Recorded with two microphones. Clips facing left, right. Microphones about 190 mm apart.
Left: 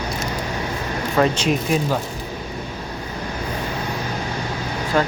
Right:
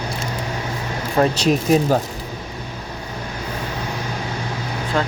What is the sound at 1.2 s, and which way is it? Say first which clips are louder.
Speech: right 2 dB; 35° right (ahead or behind).